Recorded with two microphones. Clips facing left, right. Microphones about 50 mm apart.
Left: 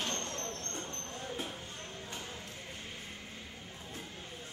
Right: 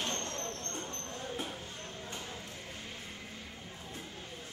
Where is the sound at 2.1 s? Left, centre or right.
Centre.